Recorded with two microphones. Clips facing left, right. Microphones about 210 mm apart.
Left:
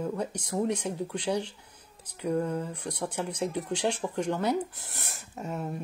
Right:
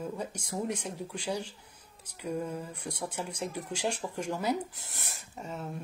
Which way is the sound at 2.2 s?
65° left (ahead or behind).